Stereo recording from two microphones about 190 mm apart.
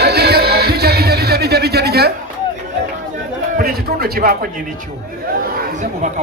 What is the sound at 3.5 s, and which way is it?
Speech, 50° right (ahead or behind).